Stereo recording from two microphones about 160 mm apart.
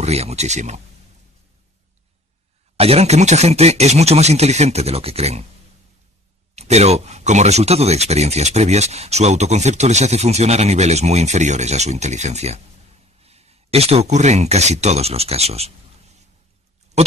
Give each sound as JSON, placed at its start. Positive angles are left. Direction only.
{"t": 0.0, "sound": "speech", "side_deg": -40}
{"t": 2.8, "sound": "speech", "side_deg": -40}
{"t": 6.5, "sound": "speech", "side_deg": -40}